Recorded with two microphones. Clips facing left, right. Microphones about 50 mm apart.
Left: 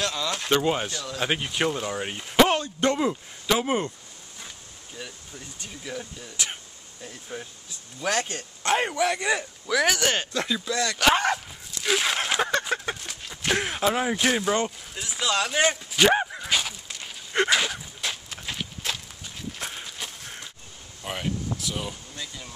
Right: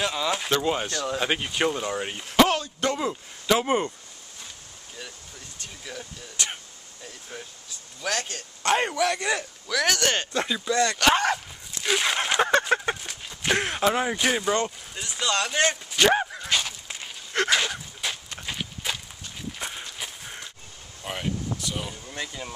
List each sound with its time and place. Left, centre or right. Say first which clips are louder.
0.0 s speech: right 2 dB; centre
0.5 s speech: left 1 dB; centre
2.4 s a sound: left 2 dB; left
3.0 s speech: left 3 dB; centre
5.6 s speech: left 3 dB; centre
8.6 s speech: even; centre
10.3 s speech: right 2 dB; centre
12.4 s a sound: right 4 dB; centre
13.4 s speech: right 1 dB; centre
17.5 s walk: even; centre
21.0 s speech: even; centre
22.1 s speech: right 4 dB; right